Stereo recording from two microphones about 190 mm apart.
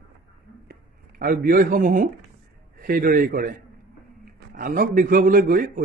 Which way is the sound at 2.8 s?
50° right (ahead or behind).